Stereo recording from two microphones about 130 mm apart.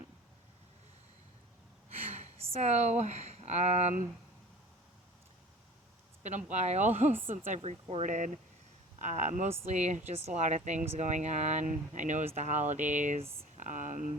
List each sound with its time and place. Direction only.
2.1 s speech: 55° right (ahead or behind)
6.2 s speech: 65° right (ahead or behind)
7.1 s speech: 15° right (ahead or behind)
7.5 s speech: 55° right (ahead or behind)
8.0 s speech: 80° right